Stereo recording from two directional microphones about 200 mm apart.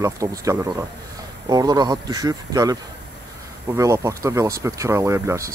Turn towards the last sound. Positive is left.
turn(degrees=-15)  # may be behind; listen again after turning